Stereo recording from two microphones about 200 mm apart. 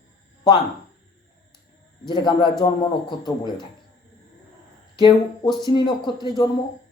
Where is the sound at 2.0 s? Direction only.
25° left (ahead or behind).